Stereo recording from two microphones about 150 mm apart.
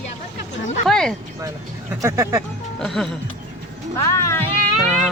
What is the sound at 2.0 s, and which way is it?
Speech, 20° right (ahead or behind).